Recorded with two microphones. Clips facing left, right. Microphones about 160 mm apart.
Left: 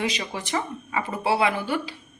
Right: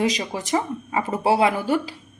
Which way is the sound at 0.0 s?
40° right (ahead or behind).